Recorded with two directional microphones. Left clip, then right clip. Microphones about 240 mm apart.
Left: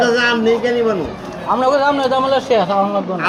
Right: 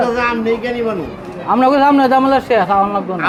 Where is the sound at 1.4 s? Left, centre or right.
Right.